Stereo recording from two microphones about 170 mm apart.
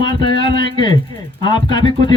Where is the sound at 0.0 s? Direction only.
25° left (ahead or behind).